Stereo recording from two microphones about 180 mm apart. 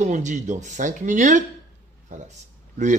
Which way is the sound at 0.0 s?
40° right (ahead or behind).